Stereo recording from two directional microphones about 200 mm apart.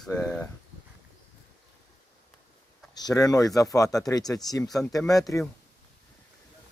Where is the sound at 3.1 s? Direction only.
15° left (ahead or behind).